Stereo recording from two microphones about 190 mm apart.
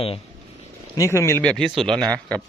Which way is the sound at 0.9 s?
15° left (ahead or behind).